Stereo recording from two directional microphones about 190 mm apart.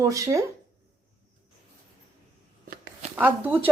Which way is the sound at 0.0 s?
15° right (ahead or behind).